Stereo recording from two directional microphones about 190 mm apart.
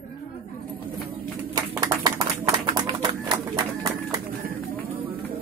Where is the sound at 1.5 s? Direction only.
20° right (ahead or behind).